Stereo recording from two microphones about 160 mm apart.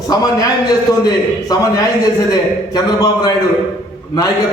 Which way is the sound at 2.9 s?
25° left (ahead or behind).